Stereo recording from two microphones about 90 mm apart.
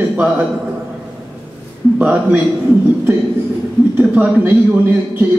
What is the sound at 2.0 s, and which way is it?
Speech, 15° right (ahead or behind).